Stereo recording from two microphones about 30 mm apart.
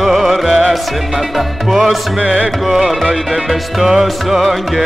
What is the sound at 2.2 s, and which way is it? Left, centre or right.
Music, right.